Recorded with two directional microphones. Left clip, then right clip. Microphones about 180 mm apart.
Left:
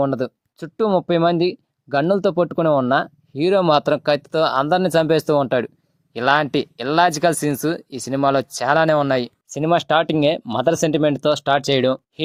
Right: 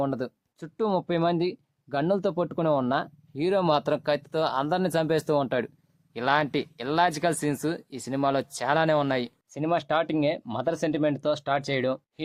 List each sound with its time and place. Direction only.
0.0 s speech: 35° left (ahead or behind)